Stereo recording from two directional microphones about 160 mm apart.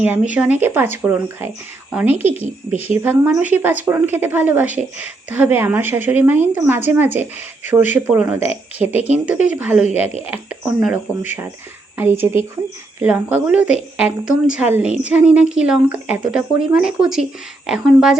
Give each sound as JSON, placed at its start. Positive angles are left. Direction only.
{"t": 0.0, "sound": "a woman's voice", "side_deg": -10}
{"t": 2.7, "sound": "a woman's voice", "side_deg": 40}
{"t": 3.0, "sound": "a woman's voice", "side_deg": -10}